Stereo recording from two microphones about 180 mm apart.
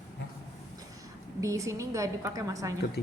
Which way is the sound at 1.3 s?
15° right (ahead or behind).